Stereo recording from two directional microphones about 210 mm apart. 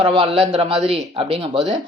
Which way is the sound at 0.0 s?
25° right (ahead or behind).